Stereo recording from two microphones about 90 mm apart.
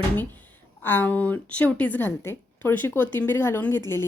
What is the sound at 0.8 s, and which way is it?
A woman's voice, 25° left (ahead or behind).